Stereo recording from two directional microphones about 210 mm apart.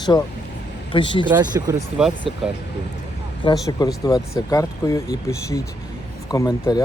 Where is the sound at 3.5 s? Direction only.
20° left (ahead or behind).